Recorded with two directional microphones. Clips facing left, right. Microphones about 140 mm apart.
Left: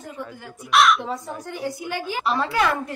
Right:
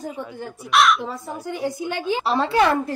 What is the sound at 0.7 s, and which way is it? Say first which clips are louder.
Speech: even; centre (ahead or behind).